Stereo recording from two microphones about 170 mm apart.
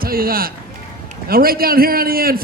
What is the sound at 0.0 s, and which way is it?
A man's voice, 60° right (ahead or behind).